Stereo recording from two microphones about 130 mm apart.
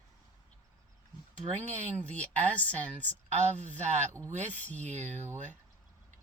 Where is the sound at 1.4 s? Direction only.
55° right (ahead or behind).